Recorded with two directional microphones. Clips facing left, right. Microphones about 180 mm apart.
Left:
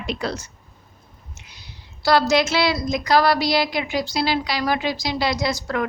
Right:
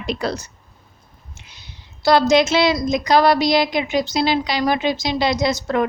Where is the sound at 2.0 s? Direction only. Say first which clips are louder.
Right 3 dB; 20° right (ahead or behind).